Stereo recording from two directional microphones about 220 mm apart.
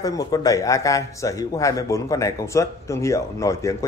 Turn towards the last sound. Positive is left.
turn(degrees=15)  # may be behind; listen again after turning